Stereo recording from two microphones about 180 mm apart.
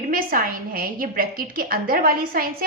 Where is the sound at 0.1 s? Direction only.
50° right (ahead or behind).